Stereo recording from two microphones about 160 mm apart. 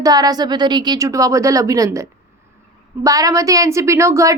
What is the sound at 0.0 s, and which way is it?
A woman's voice, 25° right (ahead or behind).